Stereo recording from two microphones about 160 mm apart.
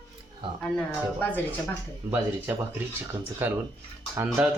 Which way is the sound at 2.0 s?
15° right (ahead or behind).